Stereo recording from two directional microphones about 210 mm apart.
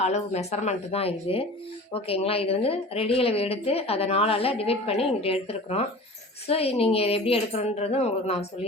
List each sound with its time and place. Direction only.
0.0 s a woman's voice: 30° left (ahead or behind)